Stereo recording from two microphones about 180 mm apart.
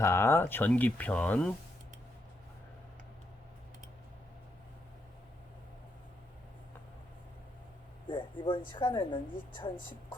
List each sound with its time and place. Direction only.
0.0 s speech: 15° left (ahead or behind)
8.0 s speech: 25° left (ahead or behind)